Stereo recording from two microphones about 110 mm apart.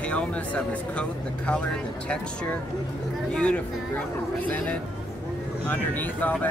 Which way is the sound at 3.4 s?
10° left (ahead or behind).